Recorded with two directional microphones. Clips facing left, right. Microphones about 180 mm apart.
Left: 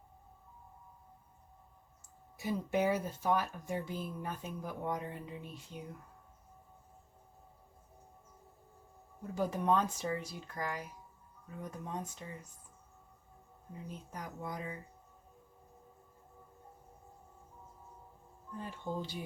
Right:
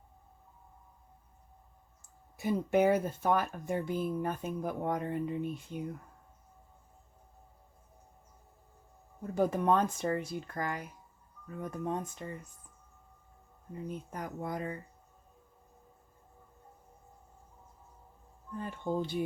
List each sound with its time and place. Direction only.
2.4 s speech: 55° right (ahead or behind)
9.3 s speech: 55° right (ahead or behind)
13.8 s speech: 55° right (ahead or behind)
18.6 s speech: 55° right (ahead or behind)